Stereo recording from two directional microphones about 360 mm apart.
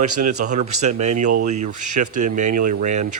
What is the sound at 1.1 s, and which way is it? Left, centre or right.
Speech, right.